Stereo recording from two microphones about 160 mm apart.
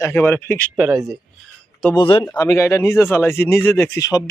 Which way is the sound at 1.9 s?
35° left (ahead or behind).